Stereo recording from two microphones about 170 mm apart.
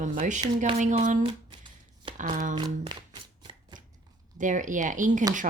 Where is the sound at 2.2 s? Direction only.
50° right (ahead or behind).